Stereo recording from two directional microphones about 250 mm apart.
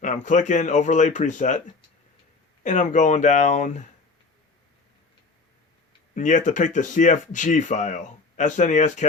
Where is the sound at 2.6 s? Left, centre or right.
Left.